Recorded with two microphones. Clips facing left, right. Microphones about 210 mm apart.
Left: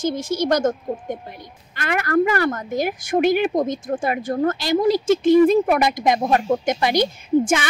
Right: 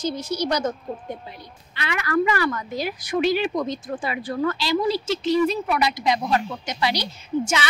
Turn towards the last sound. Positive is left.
turn(degrees=50)  # may be behind; listen again after turning